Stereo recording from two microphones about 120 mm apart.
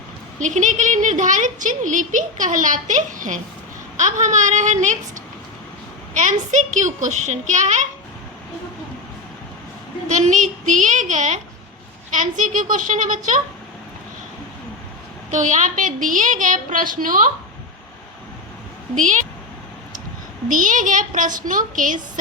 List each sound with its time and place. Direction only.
0.3 s a woman's voice: 90° right
6.1 s a woman's voice: 90° right
10.1 s a woman's voice: 90° right
15.3 s a woman's voice: 90° right
18.9 s a woman's voice: 90° right
20.5 s a woman's voice: 90° right